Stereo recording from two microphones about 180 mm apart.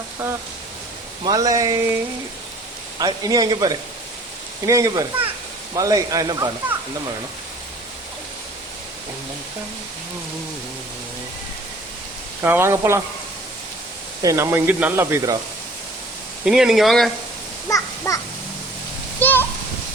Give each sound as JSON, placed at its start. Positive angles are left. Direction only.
{"t": 1.2, "sound": "speech", "side_deg": -20}
{"t": 3.0, "sound": "speech", "side_deg": -20}
{"t": 12.4, "sound": "speech", "side_deg": -15}
{"t": 14.2, "sound": "speech", "side_deg": -20}
{"t": 16.4, "sound": "speech", "side_deg": -5}
{"t": 17.7, "sound": "a child's voice", "side_deg": 20}
{"t": 19.2, "sound": "a child's voice", "side_deg": 10}